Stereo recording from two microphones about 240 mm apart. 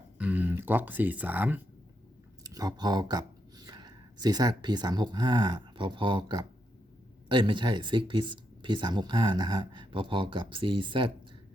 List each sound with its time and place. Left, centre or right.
0.2 s speech: centre